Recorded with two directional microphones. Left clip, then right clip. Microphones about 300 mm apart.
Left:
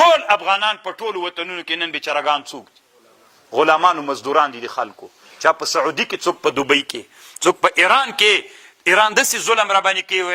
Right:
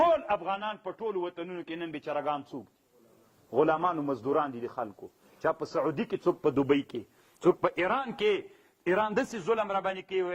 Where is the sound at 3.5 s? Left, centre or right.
Centre.